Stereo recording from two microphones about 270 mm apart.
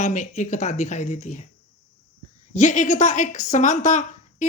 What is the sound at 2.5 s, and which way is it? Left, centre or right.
Speech, left.